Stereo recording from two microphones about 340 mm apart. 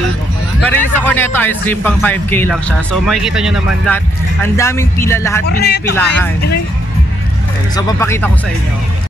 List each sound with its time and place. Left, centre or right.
0.7 s speech: centre
5.6 s a man's voice: left
7.7 s speech: centre